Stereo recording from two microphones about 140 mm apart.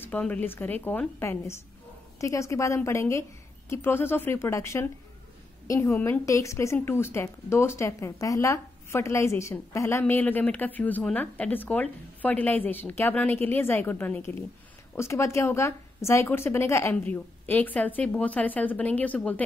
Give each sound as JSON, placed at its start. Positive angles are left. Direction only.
{"t": 0.0, "sound": "a woman's voice", "side_deg": 10}